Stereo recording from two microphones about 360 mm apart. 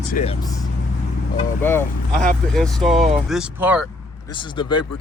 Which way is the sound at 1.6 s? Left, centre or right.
Centre.